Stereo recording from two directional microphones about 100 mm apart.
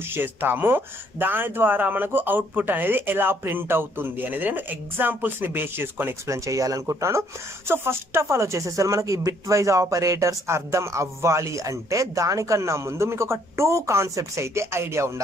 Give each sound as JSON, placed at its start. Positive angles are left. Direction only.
{"t": 0.1, "sound": "speech", "side_deg": -20}